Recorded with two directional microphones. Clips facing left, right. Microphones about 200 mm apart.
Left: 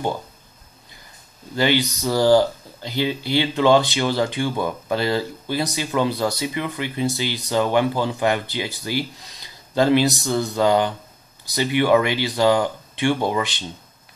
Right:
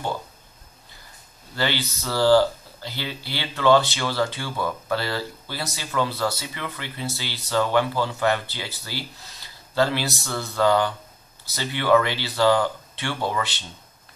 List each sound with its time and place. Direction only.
1.5 s speech: 15° left (ahead or behind)